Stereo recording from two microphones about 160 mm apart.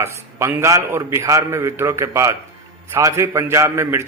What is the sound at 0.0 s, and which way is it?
A man's voice, 15° right (ahead or behind).